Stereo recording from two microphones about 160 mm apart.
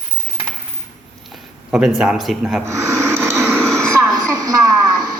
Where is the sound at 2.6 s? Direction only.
20° right (ahead or behind).